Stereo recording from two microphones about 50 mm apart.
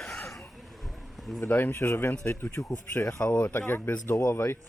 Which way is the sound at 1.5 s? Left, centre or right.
Left.